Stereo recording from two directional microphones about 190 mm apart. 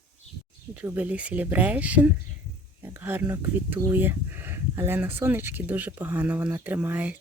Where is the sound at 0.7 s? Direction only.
10° right (ahead or behind).